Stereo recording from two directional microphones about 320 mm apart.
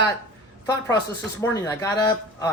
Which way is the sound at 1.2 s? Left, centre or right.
Centre.